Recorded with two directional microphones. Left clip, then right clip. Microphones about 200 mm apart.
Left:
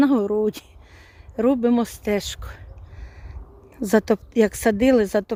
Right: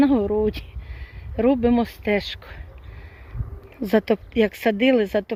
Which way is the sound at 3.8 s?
15° left (ahead or behind).